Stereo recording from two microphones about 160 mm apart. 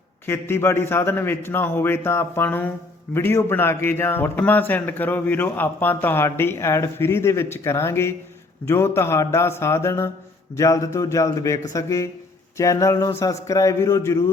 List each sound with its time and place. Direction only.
0.3 s a man's voice: 15° left (ahead or behind)